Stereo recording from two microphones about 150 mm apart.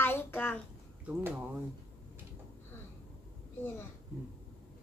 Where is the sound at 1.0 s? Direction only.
10° right (ahead or behind).